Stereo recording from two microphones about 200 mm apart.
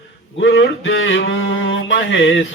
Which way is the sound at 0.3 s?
65° left (ahead or behind).